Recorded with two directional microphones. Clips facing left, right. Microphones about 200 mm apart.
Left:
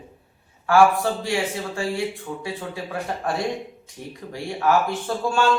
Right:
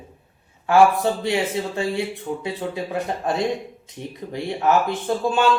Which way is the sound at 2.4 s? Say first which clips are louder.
Right 3 dB; 20° right (ahead or behind).